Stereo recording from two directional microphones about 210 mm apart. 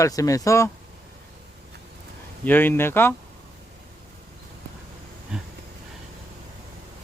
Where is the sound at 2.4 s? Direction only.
10° left (ahead or behind).